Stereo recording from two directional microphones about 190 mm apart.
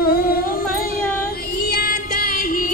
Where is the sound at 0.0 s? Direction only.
50° left (ahead or behind).